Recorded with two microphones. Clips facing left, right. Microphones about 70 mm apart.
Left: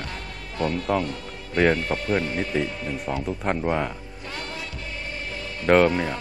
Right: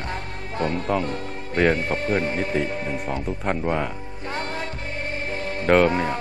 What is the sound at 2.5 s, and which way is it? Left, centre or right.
A man's voice, centre.